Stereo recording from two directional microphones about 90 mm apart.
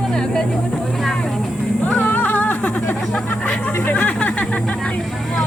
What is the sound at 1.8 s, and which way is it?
Music, 20° left (ahead or behind).